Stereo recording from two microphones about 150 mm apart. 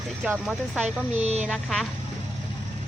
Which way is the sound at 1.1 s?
45° right (ahead or behind).